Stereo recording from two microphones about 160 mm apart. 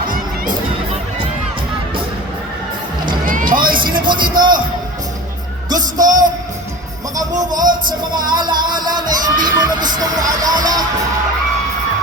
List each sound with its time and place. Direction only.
3.2 s a sound: 60° right (ahead or behind)
4.0 s music: 30° right (ahead or behind)
5.6 s speech: 25° right (ahead or behind)
7.6 s speech: 55° right (ahead or behind)
8.1 s music: 30° right (ahead or behind)